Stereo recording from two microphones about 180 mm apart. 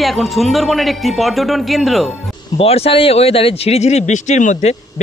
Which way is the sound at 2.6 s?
35° left (ahead or behind).